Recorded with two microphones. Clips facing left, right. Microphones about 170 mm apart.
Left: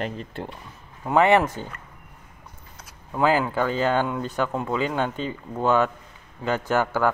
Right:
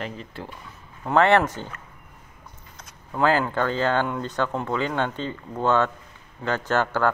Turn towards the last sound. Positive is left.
turn(degrees=10)  # may be behind; listen again after turning